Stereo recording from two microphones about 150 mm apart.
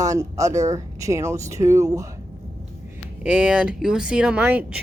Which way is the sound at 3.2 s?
5° right (ahead or behind).